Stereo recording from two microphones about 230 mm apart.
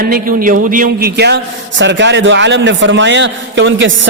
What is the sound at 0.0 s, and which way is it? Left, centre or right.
A man's voice, right.